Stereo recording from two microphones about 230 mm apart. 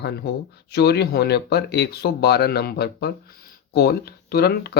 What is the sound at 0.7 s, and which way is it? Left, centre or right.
Speech, left.